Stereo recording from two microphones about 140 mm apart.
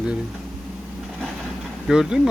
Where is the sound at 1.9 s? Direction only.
5° right (ahead or behind).